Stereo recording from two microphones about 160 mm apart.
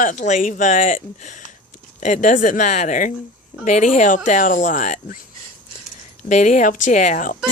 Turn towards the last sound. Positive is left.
turn(degrees=55)  # may be behind; listen again after turning